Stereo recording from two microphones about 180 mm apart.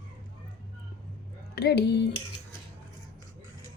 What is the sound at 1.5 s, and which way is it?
Speech, 65° left (ahead or behind).